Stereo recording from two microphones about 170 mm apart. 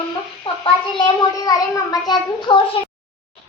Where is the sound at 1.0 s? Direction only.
25° left (ahead or behind).